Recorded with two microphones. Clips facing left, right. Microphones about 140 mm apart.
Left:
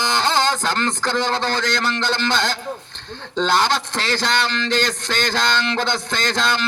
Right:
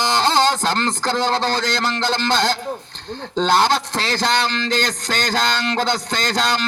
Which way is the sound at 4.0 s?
40° right (ahead or behind).